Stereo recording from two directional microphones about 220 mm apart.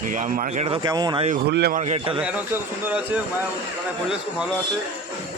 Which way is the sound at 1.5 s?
45° right (ahead or behind).